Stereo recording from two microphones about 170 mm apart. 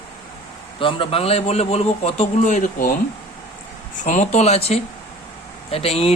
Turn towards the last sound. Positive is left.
turn(degrees=35)  # may be behind; listen again after turning